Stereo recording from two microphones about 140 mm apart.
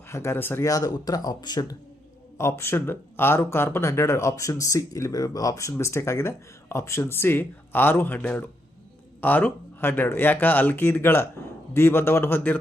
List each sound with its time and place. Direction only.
0.1 s speech: 20° left (ahead or behind)
2.4 s speech: 20° left (ahead or behind)